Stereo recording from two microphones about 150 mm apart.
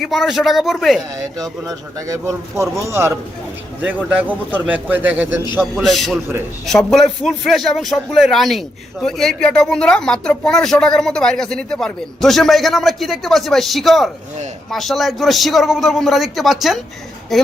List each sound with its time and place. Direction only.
0.0 s speech: centre (ahead or behind)
2.0 s a man's voice: 20° right (ahead or behind)
5.7 s a woman's voice: centre (ahead or behind)